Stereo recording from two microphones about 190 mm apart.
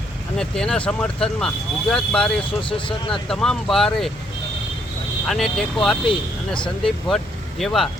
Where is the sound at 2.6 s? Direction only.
25° left (ahead or behind).